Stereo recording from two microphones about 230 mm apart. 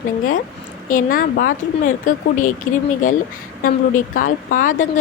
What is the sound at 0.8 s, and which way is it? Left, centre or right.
Speech, left.